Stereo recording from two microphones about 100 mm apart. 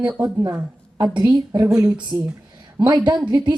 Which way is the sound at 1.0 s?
40° right (ahead or behind).